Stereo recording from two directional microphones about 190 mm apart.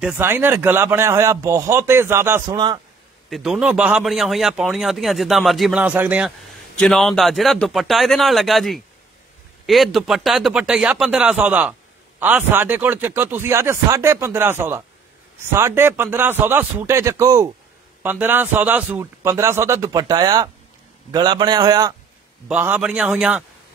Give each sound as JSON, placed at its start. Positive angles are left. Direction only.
{"t": 0.0, "sound": "speech", "side_deg": -10}
{"t": 3.3, "sound": "a man's voice", "side_deg": 0}
{"t": 22.5, "sound": "a man's voice", "side_deg": -10}